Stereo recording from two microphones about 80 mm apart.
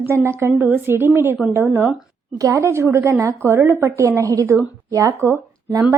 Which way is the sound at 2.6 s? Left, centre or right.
Right.